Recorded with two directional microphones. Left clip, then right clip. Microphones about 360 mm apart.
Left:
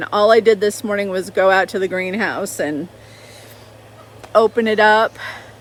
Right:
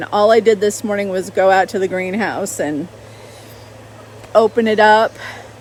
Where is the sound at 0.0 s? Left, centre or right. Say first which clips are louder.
Right 1 dB; centre.